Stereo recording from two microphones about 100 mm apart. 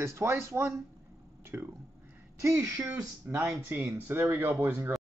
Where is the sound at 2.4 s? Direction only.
30° right (ahead or behind).